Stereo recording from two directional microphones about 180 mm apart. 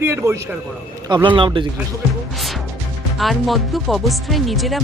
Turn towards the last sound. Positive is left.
turn(degrees=0)  # may be behind; listen again after turning